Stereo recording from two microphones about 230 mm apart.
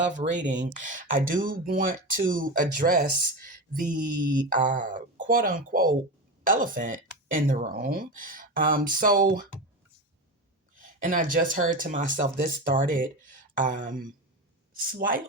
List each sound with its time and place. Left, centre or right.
0.2 s speech: right
3.8 s a sound: centre
4.4 s speech: right
10.8 s speech: right